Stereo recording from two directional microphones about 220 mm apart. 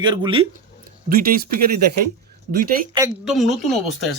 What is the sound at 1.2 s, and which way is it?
Speech, 40° right (ahead or behind).